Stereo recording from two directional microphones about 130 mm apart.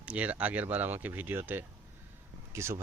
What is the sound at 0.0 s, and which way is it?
Speech, 10° right (ahead or behind).